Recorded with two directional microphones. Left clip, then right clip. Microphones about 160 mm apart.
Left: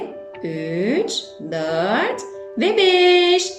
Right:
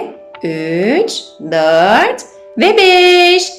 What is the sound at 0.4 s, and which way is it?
Speech, 20° left (ahead or behind).